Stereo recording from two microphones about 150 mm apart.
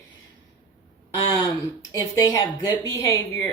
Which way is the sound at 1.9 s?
25° left (ahead or behind).